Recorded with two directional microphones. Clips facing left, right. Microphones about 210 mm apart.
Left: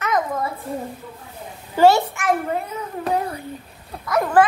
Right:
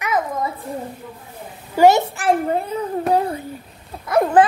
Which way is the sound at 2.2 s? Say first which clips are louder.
Right 3 dB; 30° right (ahead or behind).